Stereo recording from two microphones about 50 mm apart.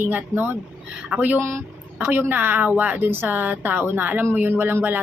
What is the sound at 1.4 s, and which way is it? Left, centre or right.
Speech, right.